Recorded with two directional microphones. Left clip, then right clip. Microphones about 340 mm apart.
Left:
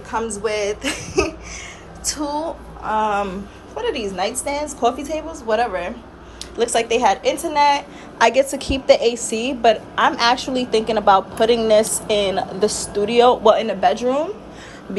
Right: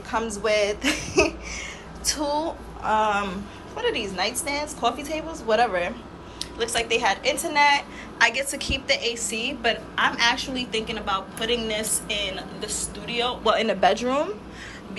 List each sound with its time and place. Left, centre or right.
0.1 s speech: centre
2.1 s a woman's voice: centre